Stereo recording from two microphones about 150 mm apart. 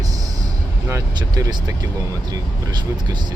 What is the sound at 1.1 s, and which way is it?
Speech, 30° right (ahead or behind).